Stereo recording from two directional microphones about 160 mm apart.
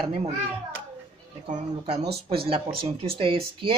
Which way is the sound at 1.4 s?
45° right (ahead or behind).